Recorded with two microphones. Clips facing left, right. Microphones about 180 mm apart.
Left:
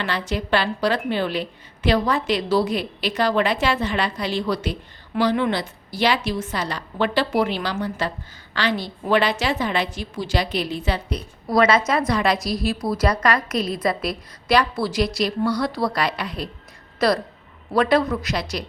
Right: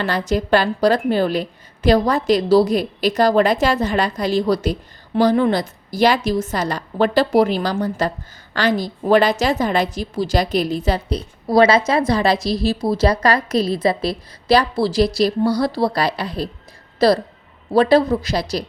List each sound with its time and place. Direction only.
0.0 s a woman's voice: 40° right (ahead or behind)